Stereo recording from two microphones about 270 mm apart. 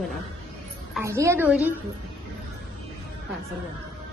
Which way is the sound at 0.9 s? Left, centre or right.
Centre.